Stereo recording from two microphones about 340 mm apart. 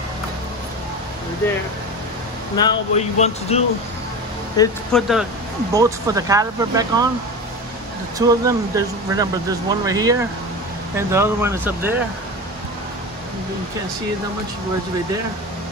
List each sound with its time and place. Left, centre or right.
2.5 s speech: centre
4.6 s speech: centre
8.3 s speech: centre